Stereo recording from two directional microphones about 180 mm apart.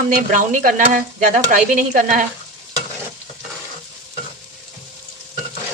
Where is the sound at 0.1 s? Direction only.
45° right (ahead or behind).